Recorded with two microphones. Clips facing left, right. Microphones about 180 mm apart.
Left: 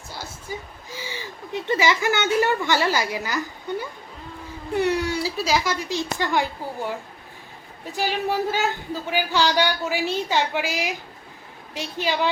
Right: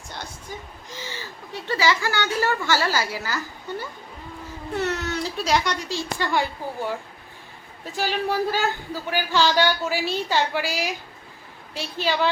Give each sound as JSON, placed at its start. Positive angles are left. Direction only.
{"t": 0.1, "sound": "a sound", "side_deg": 5}
{"t": 4.7, "sound": "a man's voice", "side_deg": 15}
{"t": 5.9, "sound": "a man's voice", "side_deg": 15}
{"t": 7.9, "sound": "a man's voice", "side_deg": 15}